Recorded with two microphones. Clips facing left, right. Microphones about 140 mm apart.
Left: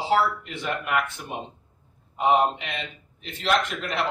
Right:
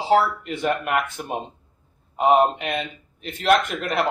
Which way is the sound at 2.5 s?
50° right (ahead or behind).